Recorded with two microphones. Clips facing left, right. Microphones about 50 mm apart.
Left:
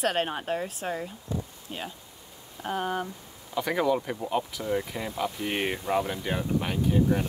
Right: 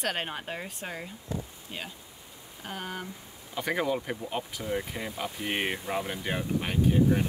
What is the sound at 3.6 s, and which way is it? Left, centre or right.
Speech, centre.